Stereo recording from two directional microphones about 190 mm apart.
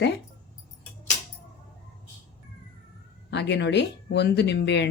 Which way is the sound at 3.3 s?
65° left (ahead or behind).